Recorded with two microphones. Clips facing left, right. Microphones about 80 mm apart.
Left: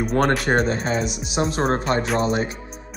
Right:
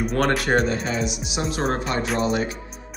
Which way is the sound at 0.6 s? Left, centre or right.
Left.